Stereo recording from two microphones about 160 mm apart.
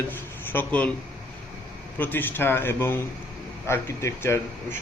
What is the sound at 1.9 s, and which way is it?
A man's voice, 10° left (ahead or behind).